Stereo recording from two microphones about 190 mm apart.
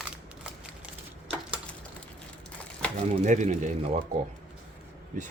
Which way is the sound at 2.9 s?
40° right (ahead or behind).